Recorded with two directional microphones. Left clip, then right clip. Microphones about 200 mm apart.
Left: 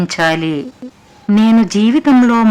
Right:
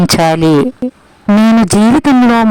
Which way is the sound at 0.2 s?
45° right (ahead or behind).